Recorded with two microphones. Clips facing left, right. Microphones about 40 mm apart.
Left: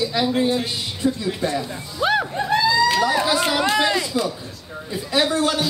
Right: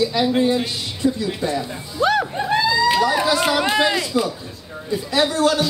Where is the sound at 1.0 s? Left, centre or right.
Left.